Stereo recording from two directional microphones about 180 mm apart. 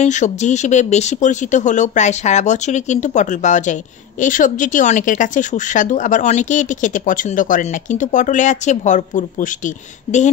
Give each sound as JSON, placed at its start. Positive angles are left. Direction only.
{"t": 0.0, "sound": "speech", "side_deg": 40}